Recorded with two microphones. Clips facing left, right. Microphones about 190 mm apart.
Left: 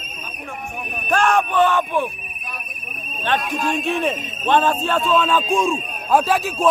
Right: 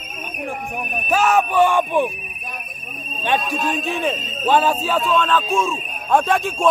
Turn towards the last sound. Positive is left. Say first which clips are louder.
# even
turn(degrees=5)  # may be behind; listen again after turning